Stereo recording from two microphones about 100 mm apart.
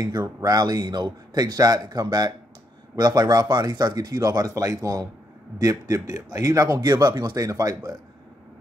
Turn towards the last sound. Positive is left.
turn(degrees=-40)  # may be behind; listen again after turning